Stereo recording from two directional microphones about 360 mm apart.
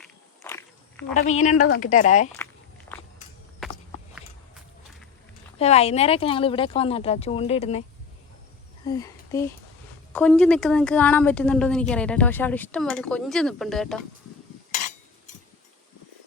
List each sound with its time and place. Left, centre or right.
0.0 s walk: centre
1.2 s a woman's voice: centre
2.9 s walk: centre
5.5 s speech: centre
8.9 s a woman's voice: centre